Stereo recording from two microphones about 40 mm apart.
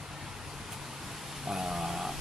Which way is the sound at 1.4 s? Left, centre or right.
Centre.